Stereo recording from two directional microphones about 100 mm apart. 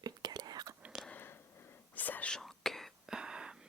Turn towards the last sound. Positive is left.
turn(degrees=-10)  # may be behind; listen again after turning